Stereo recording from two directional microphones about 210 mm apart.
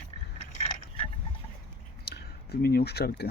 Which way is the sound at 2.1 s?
50° left (ahead or behind).